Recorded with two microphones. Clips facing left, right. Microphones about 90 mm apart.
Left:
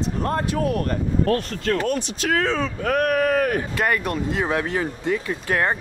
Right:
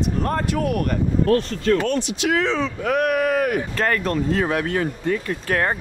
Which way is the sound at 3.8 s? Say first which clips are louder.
Right 2 dB; 10° left (ahead or behind).